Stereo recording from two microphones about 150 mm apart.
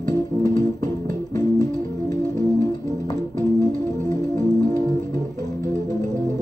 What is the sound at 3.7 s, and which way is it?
Music, 55° right (ahead or behind).